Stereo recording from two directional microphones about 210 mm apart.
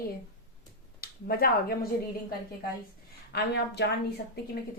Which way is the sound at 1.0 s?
45° left (ahead or behind).